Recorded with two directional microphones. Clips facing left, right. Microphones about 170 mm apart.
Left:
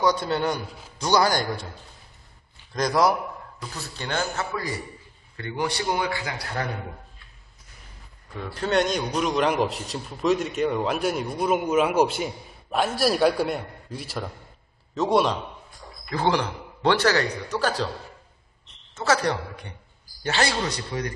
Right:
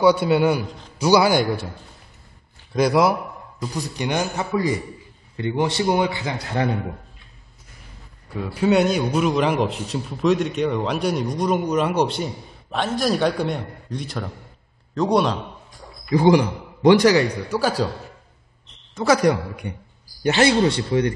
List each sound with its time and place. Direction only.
0.0 s a man's voice: 10° right (ahead or behind)
2.7 s a man's voice: 10° right (ahead or behind)
8.4 s a man's voice: 10° right (ahead or behind)
16.1 s a man's voice: 15° right (ahead or behind)
18.9 s a man's voice: 10° right (ahead or behind); by 21.1 s 30° right (ahead or behind)